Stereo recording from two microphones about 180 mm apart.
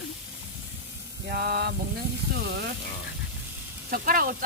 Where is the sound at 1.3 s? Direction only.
60° right (ahead or behind).